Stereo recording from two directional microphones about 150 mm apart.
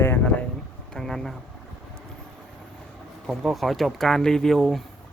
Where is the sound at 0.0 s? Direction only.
15° left (ahead or behind).